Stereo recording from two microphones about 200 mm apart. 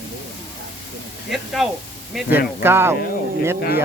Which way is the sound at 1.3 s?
Centre (ahead or behind).